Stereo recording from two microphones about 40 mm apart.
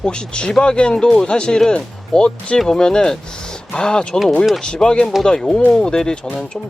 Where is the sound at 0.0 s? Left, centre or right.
Left.